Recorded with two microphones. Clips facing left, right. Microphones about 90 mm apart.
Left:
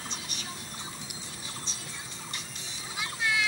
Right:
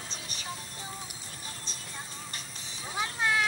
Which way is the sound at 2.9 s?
40° right (ahead or behind).